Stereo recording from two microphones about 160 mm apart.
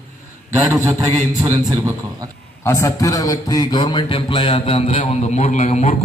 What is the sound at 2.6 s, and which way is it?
A man's voice, 20° left (ahead or behind).